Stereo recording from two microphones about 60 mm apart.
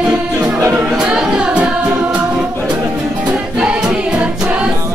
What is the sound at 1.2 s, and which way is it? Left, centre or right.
Singing, centre.